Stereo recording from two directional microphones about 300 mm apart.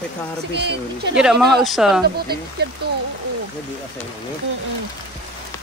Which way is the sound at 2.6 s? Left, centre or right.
Right.